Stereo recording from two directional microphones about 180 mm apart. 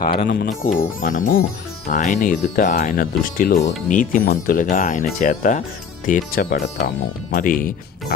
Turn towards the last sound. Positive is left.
turn(degrees=50)  # may be behind; listen again after turning